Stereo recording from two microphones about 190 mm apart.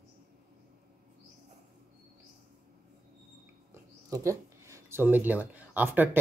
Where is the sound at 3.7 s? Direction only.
15° right (ahead or behind).